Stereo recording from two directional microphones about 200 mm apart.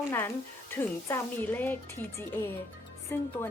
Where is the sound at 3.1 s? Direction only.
10° left (ahead or behind).